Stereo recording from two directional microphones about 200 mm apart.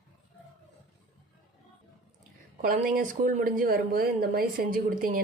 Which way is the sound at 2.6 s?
45° right (ahead or behind).